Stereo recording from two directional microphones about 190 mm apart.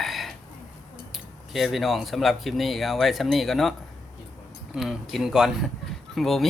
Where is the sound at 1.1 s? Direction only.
Centre (ahead or behind).